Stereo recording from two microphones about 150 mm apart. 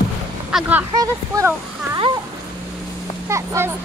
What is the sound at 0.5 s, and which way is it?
Speech, 5° right (ahead or behind).